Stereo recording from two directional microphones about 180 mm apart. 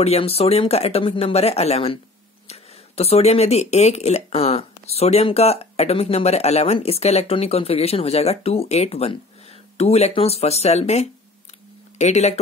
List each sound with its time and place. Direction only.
0.0 s speech: 35° left (ahead or behind)